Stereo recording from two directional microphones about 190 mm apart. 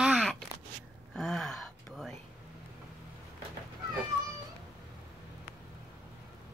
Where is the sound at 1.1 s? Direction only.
5° left (ahead or behind).